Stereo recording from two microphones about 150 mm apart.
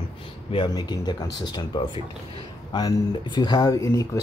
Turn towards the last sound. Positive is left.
turn(degrees=20)  # may be behind; listen again after turning